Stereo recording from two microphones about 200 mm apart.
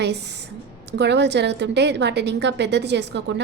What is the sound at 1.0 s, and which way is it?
A woman's voice, 60° right (ahead or behind).